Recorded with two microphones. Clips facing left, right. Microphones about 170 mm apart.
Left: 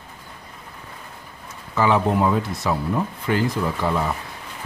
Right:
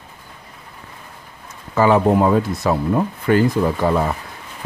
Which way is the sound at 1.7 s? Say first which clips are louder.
Right 5 dB; 50° right (ahead or behind).